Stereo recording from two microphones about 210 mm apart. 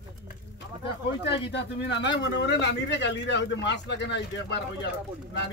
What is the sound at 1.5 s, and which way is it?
Speech, 55° left (ahead or behind).